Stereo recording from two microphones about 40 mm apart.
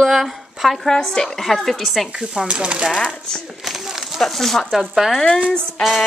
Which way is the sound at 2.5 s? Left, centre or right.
Right.